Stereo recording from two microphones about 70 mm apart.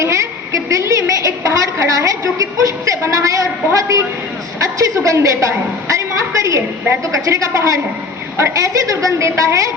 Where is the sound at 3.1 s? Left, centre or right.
Right.